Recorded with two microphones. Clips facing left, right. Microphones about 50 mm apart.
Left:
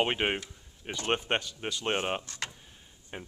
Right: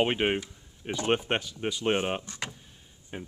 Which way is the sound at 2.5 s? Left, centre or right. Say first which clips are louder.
Right 2 dB; centre.